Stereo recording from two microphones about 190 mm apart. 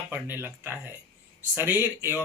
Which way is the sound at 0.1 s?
10° right (ahead or behind).